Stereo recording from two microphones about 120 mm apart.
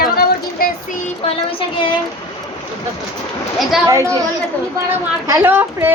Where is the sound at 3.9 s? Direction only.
25° right (ahead or behind).